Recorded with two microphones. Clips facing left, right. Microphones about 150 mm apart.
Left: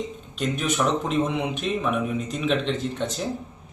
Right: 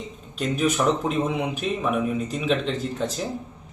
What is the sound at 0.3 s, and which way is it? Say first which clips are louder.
Speech: right 2 dB; 5° right (ahead or behind).